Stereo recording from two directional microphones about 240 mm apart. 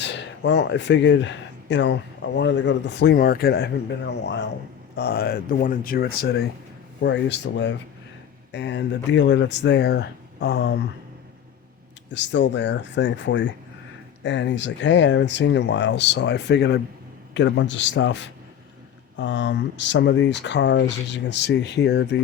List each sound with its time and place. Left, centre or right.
0.0 s speech: left
12.1 s speech: left